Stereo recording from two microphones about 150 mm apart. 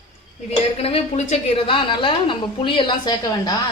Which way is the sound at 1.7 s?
35° left (ahead or behind).